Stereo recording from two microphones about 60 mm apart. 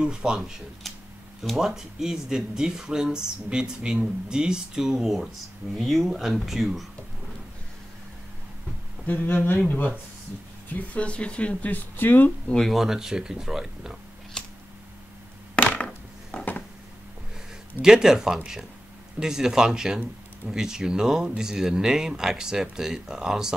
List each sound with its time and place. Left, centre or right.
0.0 s speech: centre
0.8 s a sound: centre
1.4 s speech: centre
9.0 s speech: left
12.5 s speech: centre
12.8 s speech: centre
14.4 s scissors: centre
15.5 s a sound: centre
17.8 s speech: centre